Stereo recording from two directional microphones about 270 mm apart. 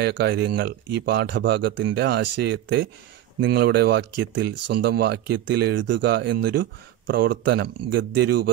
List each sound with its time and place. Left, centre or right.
0.0 s speech: right